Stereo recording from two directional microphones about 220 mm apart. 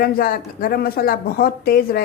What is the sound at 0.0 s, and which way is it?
Speech, 40° left (ahead or behind).